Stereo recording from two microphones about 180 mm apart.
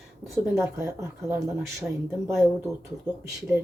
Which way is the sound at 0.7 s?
15° right (ahead or behind).